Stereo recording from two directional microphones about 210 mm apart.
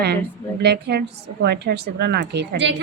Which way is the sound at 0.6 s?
50° right (ahead or behind).